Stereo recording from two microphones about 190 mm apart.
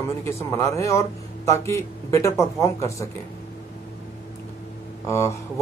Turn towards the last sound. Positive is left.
turn(degrees=15)  # may be behind; listen again after turning